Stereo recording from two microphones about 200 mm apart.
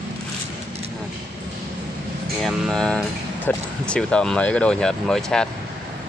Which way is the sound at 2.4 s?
Centre (ahead or behind).